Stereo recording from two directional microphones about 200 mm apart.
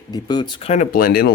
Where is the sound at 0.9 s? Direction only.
50° left (ahead or behind).